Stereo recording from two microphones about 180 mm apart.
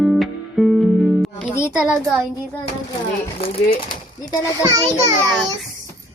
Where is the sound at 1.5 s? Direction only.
15° left (ahead or behind).